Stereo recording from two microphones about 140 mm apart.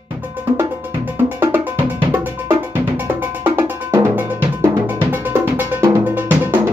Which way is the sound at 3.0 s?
15° right (ahead or behind).